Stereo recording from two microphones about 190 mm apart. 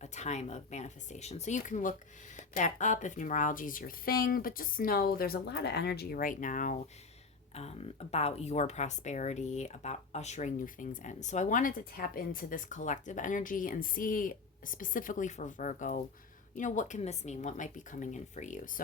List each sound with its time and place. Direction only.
0.0 s speech: 35° left (ahead or behind)
7.5 s speech: 35° left (ahead or behind)